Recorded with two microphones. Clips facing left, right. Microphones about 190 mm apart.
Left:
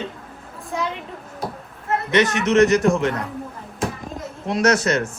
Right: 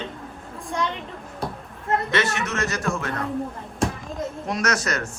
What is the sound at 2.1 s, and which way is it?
A man's voice, 20° left (ahead or behind).